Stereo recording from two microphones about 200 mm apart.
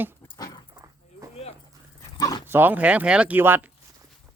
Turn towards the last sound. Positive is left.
turn(degrees=-10)  # may be behind; listen again after turning